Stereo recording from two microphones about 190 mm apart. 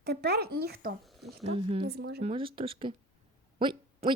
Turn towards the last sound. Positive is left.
turn(degrees=-25)  # may be behind; listen again after turning